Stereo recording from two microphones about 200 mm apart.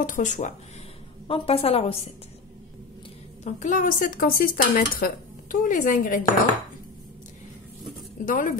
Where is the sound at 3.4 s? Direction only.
40° left (ahead or behind).